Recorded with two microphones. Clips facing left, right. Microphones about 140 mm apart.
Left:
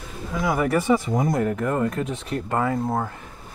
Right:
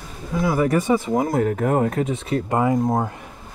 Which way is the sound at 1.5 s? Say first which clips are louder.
Right 4 dB; 65° right (ahead or behind).